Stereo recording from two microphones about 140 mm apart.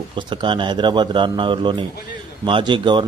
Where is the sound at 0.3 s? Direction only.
35° right (ahead or behind).